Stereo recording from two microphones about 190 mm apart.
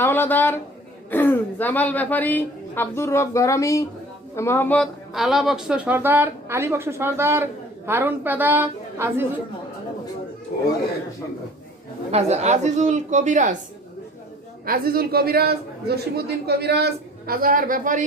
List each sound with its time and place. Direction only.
0.0 s a woman's voice: 10° left (ahead or behind); by 9.2 s 10° right (ahead or behind)
10.5 s speech: 55° left (ahead or behind)
12.1 s speech: 35° right (ahead or behind)
14.6 s a man's voice: 50° right (ahead or behind)